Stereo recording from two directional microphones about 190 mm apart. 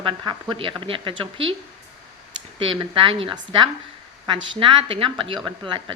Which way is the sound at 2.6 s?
25° right (ahead or behind).